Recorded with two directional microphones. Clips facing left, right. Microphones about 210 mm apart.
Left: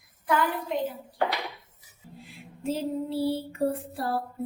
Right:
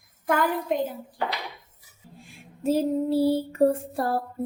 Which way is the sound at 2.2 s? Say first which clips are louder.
Right 5 dB; 45° right (ahead or behind).